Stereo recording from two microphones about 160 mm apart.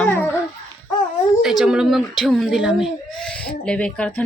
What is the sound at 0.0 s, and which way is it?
Babbling, 10° left (ahead or behind).